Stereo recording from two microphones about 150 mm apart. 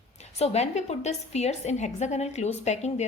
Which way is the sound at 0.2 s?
45° left (ahead or behind).